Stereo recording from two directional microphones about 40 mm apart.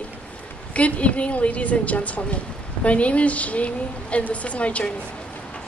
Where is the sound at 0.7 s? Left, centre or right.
Left.